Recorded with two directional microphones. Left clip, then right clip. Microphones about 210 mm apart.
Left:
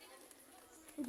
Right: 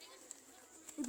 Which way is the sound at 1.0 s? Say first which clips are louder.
Even; 45° right (ahead or behind).